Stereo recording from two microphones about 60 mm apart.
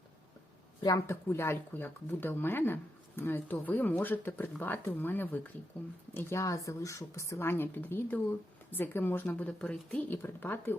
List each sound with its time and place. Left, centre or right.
1.0 s speech: left
6.1 s speech: left
6.4 s speech: left
7.5 s speech: left
9.3 s speech: left
10.2 s speech: left